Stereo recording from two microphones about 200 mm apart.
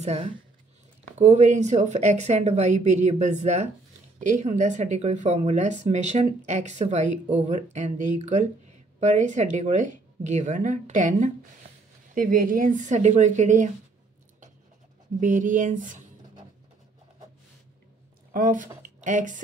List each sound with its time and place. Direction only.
0.0 s speech: 35° right (ahead or behind)
15.1 s speech: 40° right (ahead or behind)
18.3 s speech: 40° right (ahead or behind)